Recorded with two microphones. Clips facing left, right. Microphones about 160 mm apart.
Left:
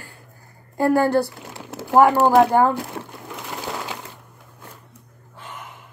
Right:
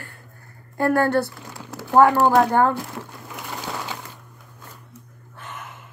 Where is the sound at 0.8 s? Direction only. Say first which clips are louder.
Left 2 dB; 15° left (ahead or behind).